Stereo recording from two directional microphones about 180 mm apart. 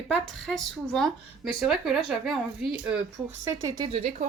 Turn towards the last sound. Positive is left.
turn(degrees=-25)  # may be behind; listen again after turning